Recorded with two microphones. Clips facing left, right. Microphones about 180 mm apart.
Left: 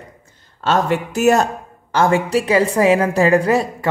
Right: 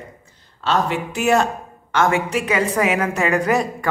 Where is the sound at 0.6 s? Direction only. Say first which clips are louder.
Left 3 dB; 45° left (ahead or behind).